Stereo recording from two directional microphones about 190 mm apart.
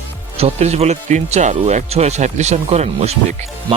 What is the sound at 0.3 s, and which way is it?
Speech, 35° right (ahead or behind).